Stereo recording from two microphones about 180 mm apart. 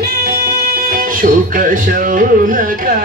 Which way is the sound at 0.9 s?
50° right (ahead or behind).